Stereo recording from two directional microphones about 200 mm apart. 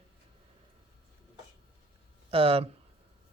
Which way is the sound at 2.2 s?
30° right (ahead or behind).